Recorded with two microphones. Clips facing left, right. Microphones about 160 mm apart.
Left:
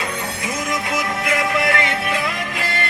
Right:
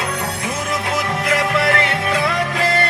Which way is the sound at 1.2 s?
35° right (ahead or behind).